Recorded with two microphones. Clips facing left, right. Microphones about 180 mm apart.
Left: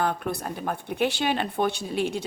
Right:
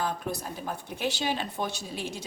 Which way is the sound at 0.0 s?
60° left (ahead or behind).